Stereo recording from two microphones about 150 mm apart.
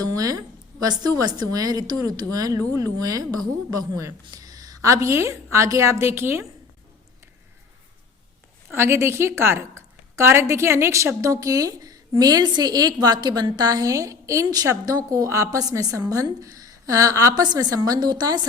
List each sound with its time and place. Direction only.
0.0 s a woman's voice: 25° right (ahead or behind)
8.7 s a woman's voice: 15° right (ahead or behind)